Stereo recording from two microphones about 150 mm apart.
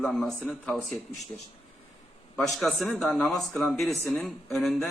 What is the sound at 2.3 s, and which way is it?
Speech, centre (ahead or behind).